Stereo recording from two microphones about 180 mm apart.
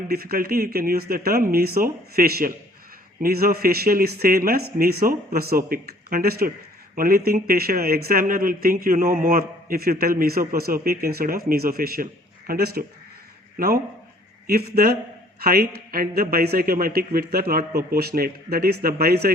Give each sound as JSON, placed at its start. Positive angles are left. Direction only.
{"t": 0.1, "sound": "speech", "side_deg": -55}
{"t": 14.4, "sound": "speech", "side_deg": -55}